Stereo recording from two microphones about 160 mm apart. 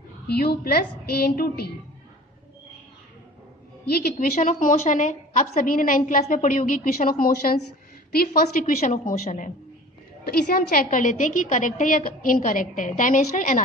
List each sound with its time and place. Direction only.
0.3 s a woman's voice: 75° left (ahead or behind)
3.9 s a woman's voice: 70° left (ahead or behind)
10.2 s a woman's voice: 75° left (ahead or behind); by 13.7 s 55° left (ahead or behind)